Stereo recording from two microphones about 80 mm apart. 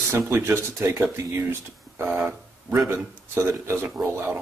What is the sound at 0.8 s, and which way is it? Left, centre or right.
Speech, right.